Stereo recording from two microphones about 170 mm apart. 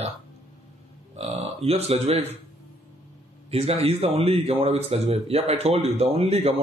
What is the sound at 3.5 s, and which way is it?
Speech, 35° right (ahead or behind).